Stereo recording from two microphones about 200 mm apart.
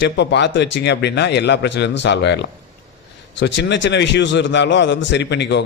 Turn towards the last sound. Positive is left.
turn(degrees=60)  # may be behind; listen again after turning